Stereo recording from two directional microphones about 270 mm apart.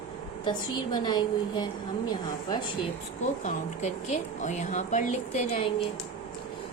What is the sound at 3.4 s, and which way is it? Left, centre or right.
A woman's voice, left.